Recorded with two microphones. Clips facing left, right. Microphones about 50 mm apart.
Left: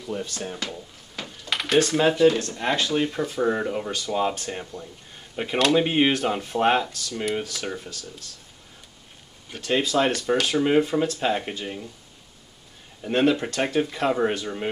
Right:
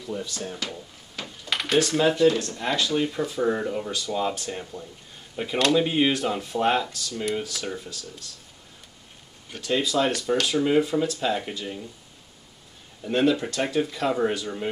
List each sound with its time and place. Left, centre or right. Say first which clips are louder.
0.1 s speech: left 1 dB; left
0.4 s speech: left 1 dB; left
1.4 s computer keyboard: left 1 dB; centre
1.8 s speech: left 2 dB; left
4.7 s speech: left 1 dB; centre
5.3 s speech: left 1 dB; left
9.6 s speech: left 1 dB; left
13.1 s speech: left 1 dB; left